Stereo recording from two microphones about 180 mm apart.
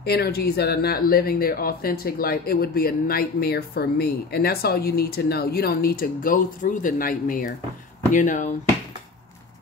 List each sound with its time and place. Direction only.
0.0 s speech: 60° left (ahead or behind); by 8.5 s 45° left (ahead or behind)